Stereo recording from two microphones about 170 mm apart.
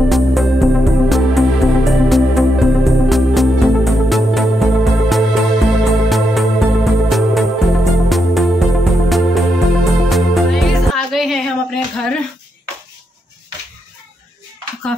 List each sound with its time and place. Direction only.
0.1 s music: centre (ahead or behind)